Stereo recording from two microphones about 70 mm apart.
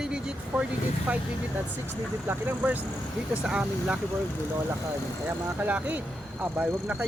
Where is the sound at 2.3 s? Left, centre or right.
Right.